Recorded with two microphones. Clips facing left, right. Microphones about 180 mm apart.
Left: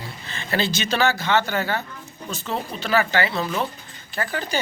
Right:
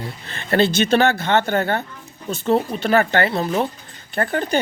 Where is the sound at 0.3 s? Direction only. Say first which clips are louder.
Right 7 dB; 55° right (ahead or behind).